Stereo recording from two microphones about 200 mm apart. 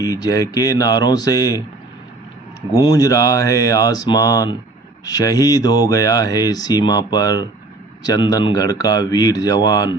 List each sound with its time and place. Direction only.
0.0 s speech: 20° left (ahead or behind)
2.8 s speech: 20° left (ahead or behind)